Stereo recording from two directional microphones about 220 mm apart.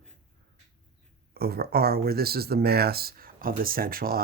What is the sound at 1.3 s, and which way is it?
Speech, 45° right (ahead or behind).